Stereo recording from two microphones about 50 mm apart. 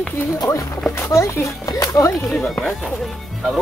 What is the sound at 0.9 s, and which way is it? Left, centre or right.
Speech, left.